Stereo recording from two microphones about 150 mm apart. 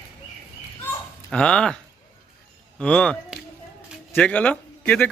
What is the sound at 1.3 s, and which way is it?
Speech, 5° left (ahead or behind).